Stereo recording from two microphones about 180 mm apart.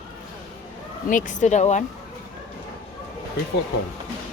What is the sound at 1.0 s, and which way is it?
Speech, 45° left (ahead or behind).